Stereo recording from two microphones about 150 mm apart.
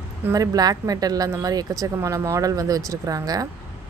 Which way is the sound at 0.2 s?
20° right (ahead or behind).